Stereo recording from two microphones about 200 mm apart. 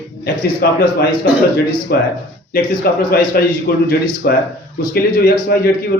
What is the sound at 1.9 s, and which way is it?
Speech, 50° left (ahead or behind).